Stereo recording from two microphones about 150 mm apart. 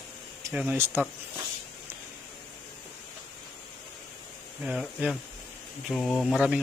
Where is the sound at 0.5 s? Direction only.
10° right (ahead or behind).